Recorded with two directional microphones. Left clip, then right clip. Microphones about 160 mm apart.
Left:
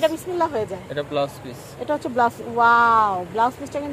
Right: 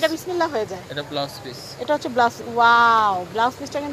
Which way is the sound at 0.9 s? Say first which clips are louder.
Left 4 dB; 70° left (ahead or behind).